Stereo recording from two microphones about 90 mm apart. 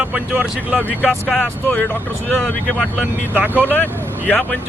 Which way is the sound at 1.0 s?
5° right (ahead or behind).